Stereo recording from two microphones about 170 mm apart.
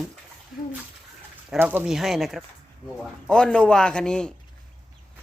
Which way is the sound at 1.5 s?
10° right (ahead or behind).